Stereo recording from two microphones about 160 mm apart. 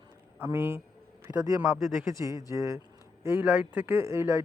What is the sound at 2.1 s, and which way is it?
Speech, 20° right (ahead or behind).